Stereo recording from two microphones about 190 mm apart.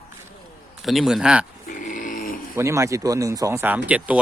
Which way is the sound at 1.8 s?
45° left (ahead or behind).